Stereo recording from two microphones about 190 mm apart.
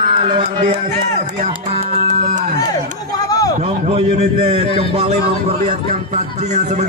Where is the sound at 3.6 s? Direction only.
35° right (ahead or behind).